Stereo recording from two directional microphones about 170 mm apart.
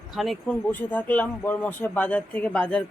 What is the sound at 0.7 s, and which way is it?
Speech, 10° left (ahead or behind).